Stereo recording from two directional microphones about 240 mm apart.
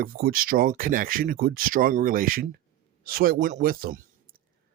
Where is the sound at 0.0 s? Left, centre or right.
Right.